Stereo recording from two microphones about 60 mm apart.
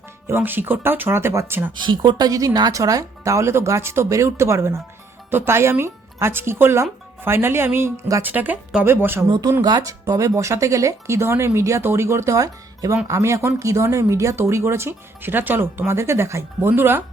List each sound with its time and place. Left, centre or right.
0.3 s speech: right
1.5 s speech: right
2.2 s speech: right
8.2 s speech: right
9.7 s speech: right
11.8 s speech: right
15.9 s speech: right